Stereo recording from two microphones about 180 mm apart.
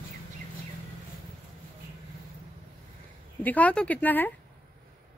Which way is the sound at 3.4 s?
10° left (ahead or behind).